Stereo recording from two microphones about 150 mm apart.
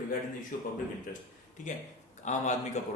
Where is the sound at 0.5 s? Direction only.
65° left (ahead or behind).